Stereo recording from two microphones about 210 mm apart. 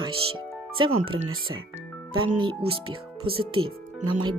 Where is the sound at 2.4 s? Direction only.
25° right (ahead or behind).